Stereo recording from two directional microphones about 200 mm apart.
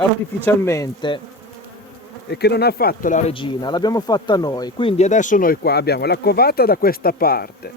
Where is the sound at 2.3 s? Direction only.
55° left (ahead or behind).